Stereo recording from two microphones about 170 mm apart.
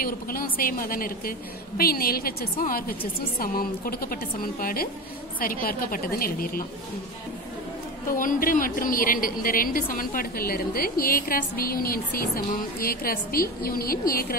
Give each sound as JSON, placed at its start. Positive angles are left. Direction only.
{"t": 0.0, "sound": "a woman's voice", "side_deg": 60}
{"t": 8.1, "sound": "a woman's voice", "side_deg": 55}